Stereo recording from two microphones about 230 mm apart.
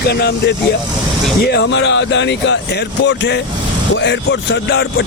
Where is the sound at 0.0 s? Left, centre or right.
Left.